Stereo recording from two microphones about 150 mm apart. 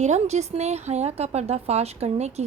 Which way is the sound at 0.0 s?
50° right (ahead or behind).